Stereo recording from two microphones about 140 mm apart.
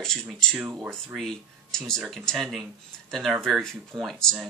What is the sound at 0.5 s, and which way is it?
Speech, 5° right (ahead or behind).